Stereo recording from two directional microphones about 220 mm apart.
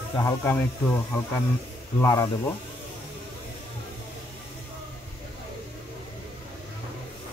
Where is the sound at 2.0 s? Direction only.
15° left (ahead or behind).